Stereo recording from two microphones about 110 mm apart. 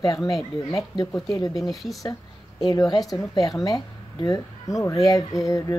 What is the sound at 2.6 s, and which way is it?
Speech, 40° left (ahead or behind).